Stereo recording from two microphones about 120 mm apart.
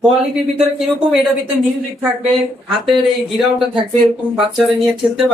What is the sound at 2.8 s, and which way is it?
Speech, centre (ahead or behind).